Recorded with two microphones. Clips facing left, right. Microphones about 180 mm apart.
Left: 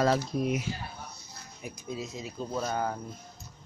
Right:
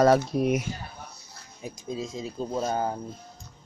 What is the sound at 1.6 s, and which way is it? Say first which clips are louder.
Speech: right 4 dB; 25° right (ahead or behind).